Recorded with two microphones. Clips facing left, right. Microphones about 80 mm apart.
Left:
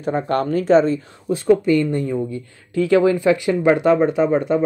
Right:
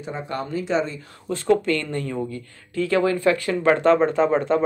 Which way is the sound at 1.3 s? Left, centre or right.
Centre.